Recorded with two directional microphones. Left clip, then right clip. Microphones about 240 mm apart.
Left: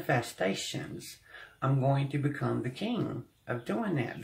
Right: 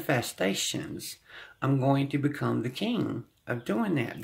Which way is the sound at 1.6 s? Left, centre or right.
Right.